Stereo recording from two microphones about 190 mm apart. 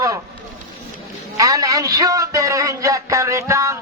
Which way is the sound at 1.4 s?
15° right (ahead or behind).